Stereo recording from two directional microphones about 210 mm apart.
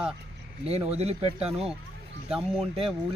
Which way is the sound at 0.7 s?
30° right (ahead or behind).